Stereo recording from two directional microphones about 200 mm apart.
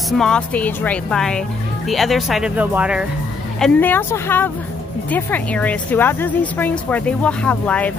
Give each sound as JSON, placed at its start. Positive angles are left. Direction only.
{"t": 0.2, "sound": "a woman's voice", "side_deg": 5}
{"t": 3.5, "sound": "a woman's voice", "side_deg": 5}